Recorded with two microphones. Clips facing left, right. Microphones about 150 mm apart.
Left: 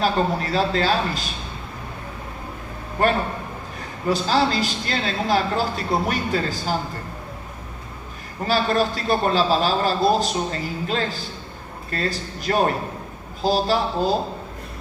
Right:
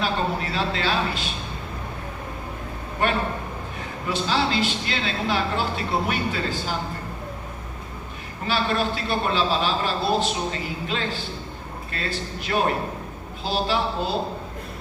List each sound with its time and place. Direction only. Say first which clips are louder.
0.0 s a man's voice: left 4 dB; 40° left (ahead or behind)
3.0 s a man's voice: left 3 dB; 40° left (ahead or behind)
8.4 s a man's voice: left 3 dB; 40° left (ahead or behind)